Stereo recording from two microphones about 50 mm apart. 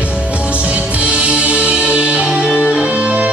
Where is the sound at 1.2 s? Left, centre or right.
Right.